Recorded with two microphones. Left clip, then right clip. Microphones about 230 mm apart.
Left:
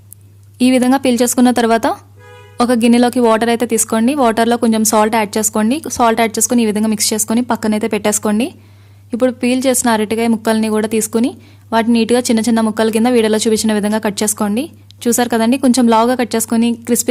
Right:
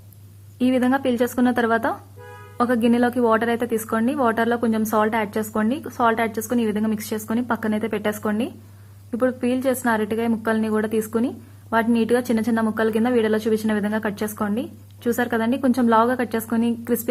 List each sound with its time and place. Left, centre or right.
0.6 s a woman's voice: left